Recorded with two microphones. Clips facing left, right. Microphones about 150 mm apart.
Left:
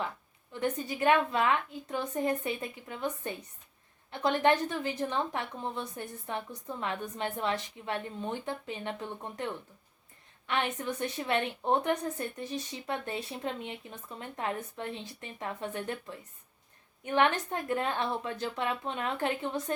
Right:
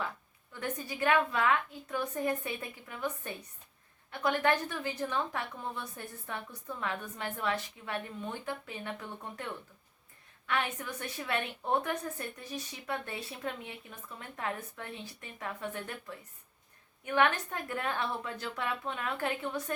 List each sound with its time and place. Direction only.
0.6 s a woman's voice: 25° left (ahead or behind)